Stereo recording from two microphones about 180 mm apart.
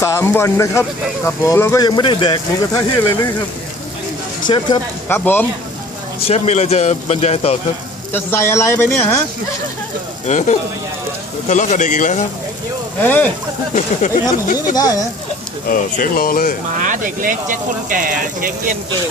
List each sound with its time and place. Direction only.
0.0 s speech: 15° left (ahead or behind)
4.4 s speech: 25° left (ahead or behind)
5.0 s speech: 10° left (ahead or behind)
6.2 s a man's voice: 35° left (ahead or behind)
8.1 s speech: 15° left (ahead or behind)
10.2 s a man's voice: 40° left (ahead or behind)
13.0 s speech: 10° left (ahead or behind)
13.7 s speech: 45° left (ahead or behind)
14.8 s speech: 20° left (ahead or behind)
15.7 s speech: 50° left (ahead or behind)
16.7 s speech: 45° right (ahead or behind)